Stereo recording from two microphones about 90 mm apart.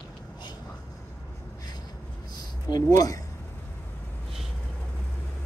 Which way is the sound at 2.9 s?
40° left (ahead or behind).